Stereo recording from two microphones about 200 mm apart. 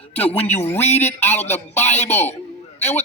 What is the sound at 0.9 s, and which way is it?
Speech, 35° left (ahead or behind).